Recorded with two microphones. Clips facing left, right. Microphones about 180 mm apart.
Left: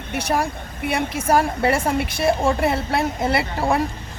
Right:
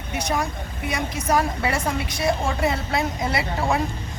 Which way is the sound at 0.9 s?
60° left (ahead or behind).